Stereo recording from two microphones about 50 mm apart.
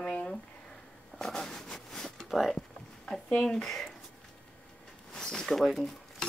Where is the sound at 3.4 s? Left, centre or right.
Centre.